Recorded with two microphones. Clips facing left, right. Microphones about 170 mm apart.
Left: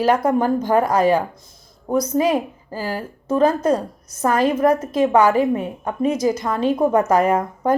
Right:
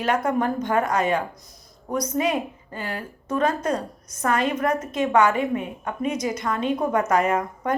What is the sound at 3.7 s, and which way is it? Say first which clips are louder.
Speech: left 6 dB; 10° left (ahead or behind).